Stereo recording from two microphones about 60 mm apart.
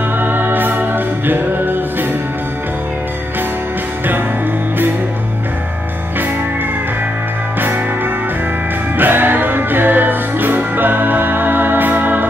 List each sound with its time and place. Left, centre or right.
0.2 s music: right
7.6 s music: right